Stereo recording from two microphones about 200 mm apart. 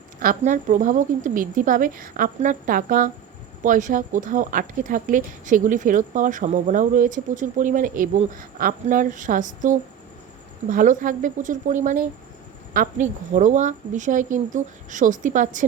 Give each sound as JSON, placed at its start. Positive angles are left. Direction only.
{"t": 0.2, "sound": "speech", "side_deg": -40}